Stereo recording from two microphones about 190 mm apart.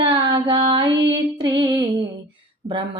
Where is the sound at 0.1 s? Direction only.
25° right (ahead or behind).